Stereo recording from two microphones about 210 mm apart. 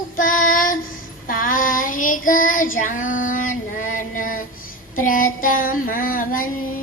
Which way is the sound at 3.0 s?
70° left (ahead or behind).